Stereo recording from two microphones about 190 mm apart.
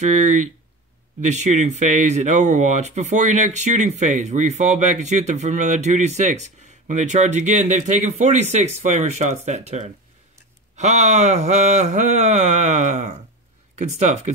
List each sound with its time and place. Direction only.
1.2 s speech: 40° right (ahead or behind)